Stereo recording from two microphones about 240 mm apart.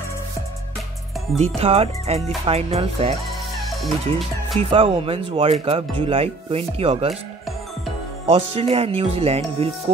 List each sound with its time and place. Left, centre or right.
1.6 s speech: right
3.5 s music: centre
4.6 s speech: right
8.3 s speech: right